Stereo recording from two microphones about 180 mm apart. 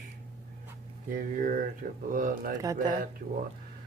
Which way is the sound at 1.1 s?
50° right (ahead or behind).